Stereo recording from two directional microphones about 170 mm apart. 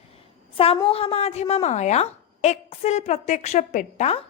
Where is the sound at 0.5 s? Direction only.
35° left (ahead or behind).